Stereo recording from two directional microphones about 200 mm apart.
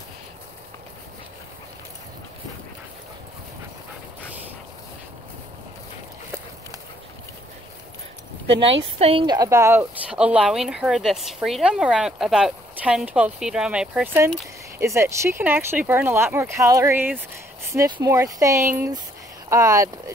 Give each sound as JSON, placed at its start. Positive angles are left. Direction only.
{"t": 8.9, "sound": "a woman's voice", "side_deg": -30}